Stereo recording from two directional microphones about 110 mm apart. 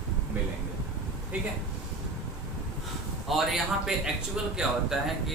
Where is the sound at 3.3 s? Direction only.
Centre (ahead or behind).